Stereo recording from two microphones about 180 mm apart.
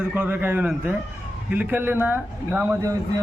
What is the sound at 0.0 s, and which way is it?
A man's voice, 10° right (ahead or behind).